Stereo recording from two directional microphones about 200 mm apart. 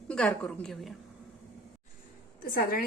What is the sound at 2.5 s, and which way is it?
Speech, 50° left (ahead or behind).